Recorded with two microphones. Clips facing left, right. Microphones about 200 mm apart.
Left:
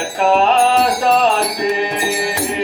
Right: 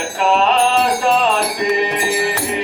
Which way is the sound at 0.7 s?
40° left (ahead or behind).